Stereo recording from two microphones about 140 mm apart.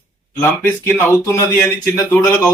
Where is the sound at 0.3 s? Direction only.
15° left (ahead or behind).